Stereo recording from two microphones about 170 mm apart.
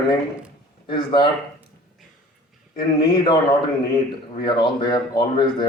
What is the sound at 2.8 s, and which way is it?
Speech, 25° left (ahead or behind).